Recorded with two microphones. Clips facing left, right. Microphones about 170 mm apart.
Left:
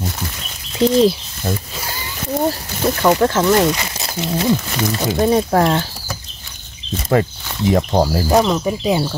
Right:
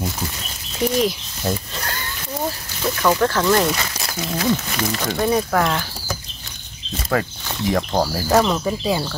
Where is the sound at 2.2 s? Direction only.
45° left (ahead or behind).